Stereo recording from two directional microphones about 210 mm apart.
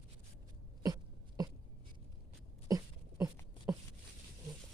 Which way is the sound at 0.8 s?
20° right (ahead or behind).